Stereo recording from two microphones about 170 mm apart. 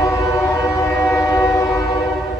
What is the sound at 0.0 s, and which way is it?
Train, 20° left (ahead or behind).